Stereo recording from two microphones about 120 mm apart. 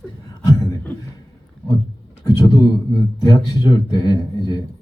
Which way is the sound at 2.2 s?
30° left (ahead or behind).